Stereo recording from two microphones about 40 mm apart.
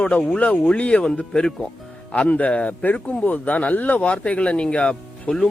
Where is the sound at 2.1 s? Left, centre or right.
Left.